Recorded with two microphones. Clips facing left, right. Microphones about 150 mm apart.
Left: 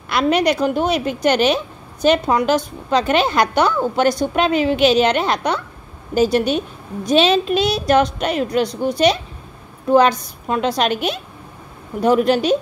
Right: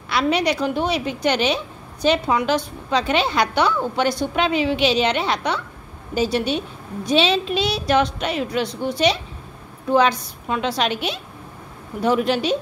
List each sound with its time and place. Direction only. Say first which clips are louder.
0.1 s a woman's voice: left 3 dB; 50° left (ahead or behind)